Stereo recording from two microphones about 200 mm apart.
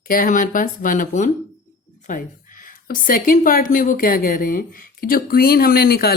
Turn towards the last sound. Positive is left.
turn(degrees=50)  # may be behind; listen again after turning